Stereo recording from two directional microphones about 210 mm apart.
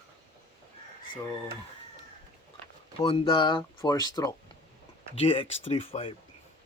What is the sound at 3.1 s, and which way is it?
Speech, 25° left (ahead or behind).